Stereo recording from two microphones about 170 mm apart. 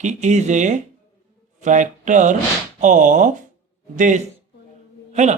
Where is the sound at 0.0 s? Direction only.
45° right (ahead or behind).